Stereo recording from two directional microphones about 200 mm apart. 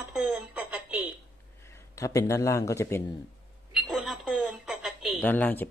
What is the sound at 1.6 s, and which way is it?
Speech, 15° left (ahead or behind).